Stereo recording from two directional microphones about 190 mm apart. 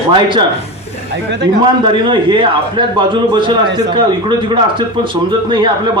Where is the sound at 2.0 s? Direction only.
25° right (ahead or behind).